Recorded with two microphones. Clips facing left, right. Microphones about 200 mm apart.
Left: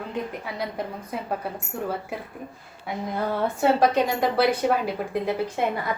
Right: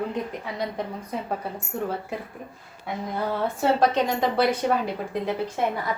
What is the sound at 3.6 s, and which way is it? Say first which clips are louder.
A woman's voice: left 1 dB; 10° left (ahead or behind).